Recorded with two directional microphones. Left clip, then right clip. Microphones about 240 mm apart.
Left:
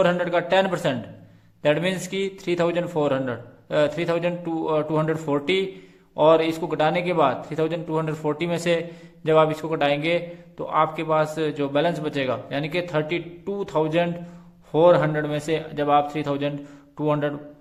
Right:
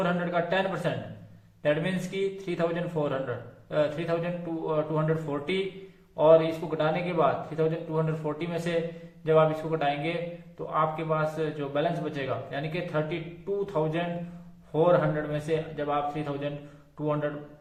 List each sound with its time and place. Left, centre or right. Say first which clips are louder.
0.0 s a man's voice: left 7 dB; left